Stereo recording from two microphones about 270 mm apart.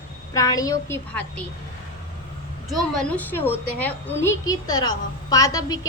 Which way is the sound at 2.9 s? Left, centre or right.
Centre.